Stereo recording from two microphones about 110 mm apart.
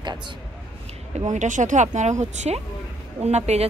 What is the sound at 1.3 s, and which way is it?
A woman's voice, 90° right.